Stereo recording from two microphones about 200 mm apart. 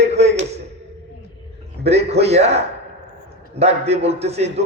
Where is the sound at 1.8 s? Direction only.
30° right (ahead or behind).